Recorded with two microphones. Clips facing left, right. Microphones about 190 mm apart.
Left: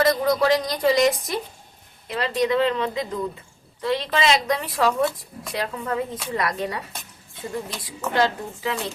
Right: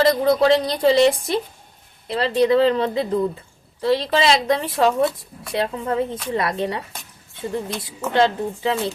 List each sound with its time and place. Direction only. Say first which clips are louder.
0.0 s speech: right 3 dB; 30° right (ahead or behind)
8.1 s speech: right 4 dB; 25° right (ahead or behind)